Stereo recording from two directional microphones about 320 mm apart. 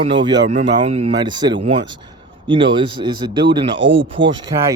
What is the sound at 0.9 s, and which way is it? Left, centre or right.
Speech, centre.